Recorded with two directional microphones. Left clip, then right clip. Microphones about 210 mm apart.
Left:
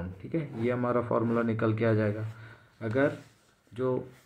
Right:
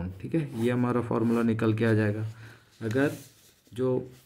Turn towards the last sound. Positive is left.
turn(degrees=-35)  # may be behind; listen again after turning